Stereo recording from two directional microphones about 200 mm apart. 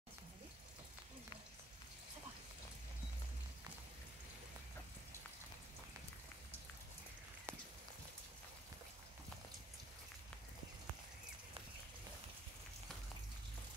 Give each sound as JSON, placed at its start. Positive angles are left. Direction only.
{"t": 7.5, "sound": "clip-clop", "side_deg": -10}